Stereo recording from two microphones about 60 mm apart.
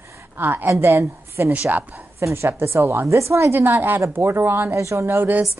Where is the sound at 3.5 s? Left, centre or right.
Right.